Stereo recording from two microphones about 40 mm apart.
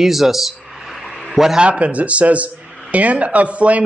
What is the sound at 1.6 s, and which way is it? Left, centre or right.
A man's voice, right.